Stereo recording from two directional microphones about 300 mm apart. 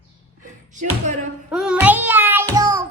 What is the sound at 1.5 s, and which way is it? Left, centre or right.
Child singing, centre.